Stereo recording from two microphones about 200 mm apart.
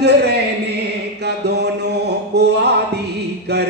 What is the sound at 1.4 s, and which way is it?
Mantra, 55° right (ahead or behind).